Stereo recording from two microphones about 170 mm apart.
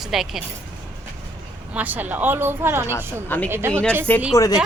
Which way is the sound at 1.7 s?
10° right (ahead or behind).